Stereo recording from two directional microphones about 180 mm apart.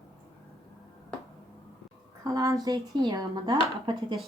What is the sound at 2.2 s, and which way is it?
Speech, 20° right (ahead or behind).